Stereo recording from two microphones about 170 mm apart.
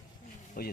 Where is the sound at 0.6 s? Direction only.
60° left (ahead or behind).